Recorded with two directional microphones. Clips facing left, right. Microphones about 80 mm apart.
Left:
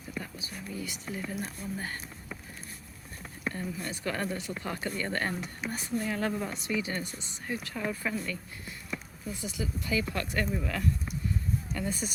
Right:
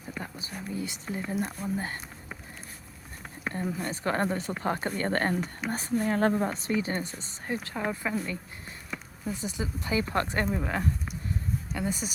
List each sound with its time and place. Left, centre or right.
0.2 s speech: right
3.7 s speech: right
11.8 s speech: centre